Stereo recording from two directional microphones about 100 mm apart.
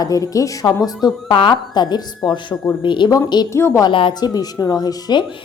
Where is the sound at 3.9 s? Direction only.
55° left (ahead or behind).